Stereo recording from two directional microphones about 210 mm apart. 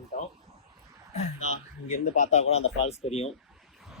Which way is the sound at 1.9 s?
35° left (ahead or behind).